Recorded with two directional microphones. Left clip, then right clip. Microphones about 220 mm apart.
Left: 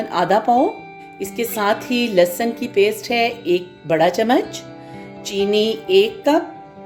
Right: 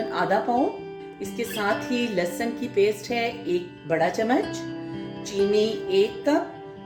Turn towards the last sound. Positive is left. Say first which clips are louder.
# left 7 dB
turn(degrees=35)  # may be behind; listen again after turning